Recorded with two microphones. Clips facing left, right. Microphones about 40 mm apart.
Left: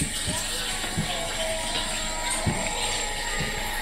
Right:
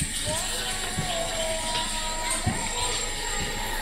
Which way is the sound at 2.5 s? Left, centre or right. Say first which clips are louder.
Left 1 dB; left.